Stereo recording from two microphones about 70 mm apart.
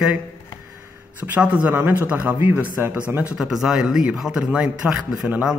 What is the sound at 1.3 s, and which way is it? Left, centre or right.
Speech, right.